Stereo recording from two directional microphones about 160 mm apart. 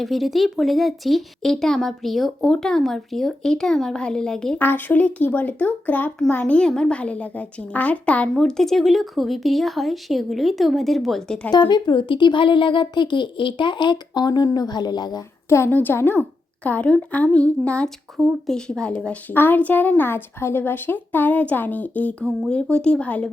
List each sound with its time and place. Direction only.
0.0 s speech: centre (ahead or behind)
11.5 s a woman's voice: 25° left (ahead or behind); by 23.3 s 10° left (ahead or behind)